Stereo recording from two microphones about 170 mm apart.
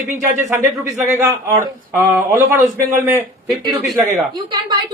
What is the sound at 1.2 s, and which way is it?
Speech, 15° right (ahead or behind).